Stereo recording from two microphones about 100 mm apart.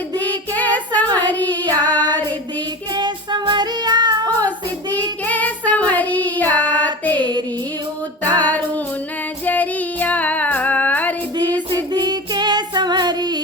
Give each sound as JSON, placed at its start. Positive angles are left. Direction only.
{"t": 0.2, "sound": "child singing", "side_deg": 15}
{"t": 1.9, "sound": "child singing", "side_deg": -45}
{"t": 5.2, "sound": "child singing", "side_deg": 15}
{"t": 6.6, "sound": "child singing", "side_deg": -45}
{"t": 6.8, "sound": "music", "side_deg": 15}
{"t": 8.2, "sound": "female singing", "side_deg": 15}
{"t": 9.5, "sound": "child singing", "side_deg": 15}
{"t": 11.7, "sound": "child singing", "side_deg": -45}